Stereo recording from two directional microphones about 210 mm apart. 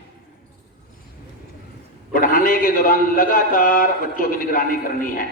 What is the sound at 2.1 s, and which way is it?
A man's voice, 40° left (ahead or behind).